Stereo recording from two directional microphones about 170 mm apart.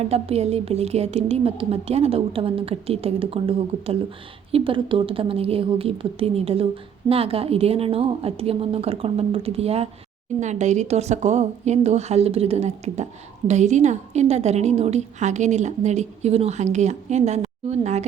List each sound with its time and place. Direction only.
0.0 s a woman's voice: 35° right (ahead or behind)